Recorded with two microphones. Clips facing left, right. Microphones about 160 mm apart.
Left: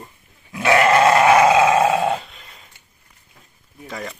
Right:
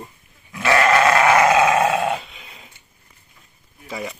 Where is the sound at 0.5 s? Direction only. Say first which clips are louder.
Left 2 dB; 25° left (ahead or behind).